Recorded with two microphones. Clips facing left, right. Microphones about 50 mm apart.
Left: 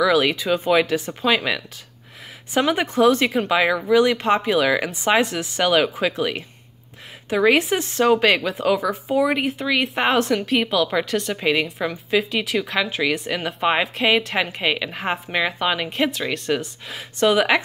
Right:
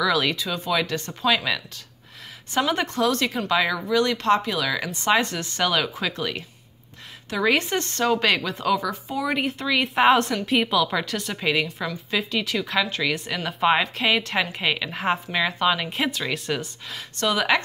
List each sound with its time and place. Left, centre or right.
0.0 s speech: centre
0.4 s speech: left
0.8 s speech: centre
2.7 s speech: centre
4.9 s speech: centre
7.4 s speech: centre
17.2 s speech: centre